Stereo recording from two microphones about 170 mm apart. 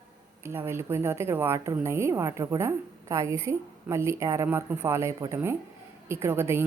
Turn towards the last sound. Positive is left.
turn(degrees=-15)  # may be behind; listen again after turning